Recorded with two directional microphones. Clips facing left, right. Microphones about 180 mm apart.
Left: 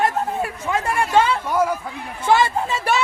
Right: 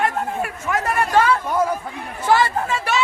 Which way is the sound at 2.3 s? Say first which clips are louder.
Even; 20° left (ahead or behind).